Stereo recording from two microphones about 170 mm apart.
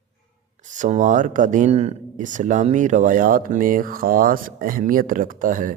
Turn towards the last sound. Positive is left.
turn(degrees=-50)  # may be behind; listen again after turning